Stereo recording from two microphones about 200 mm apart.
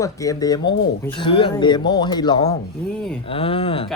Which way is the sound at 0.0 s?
15° left (ahead or behind).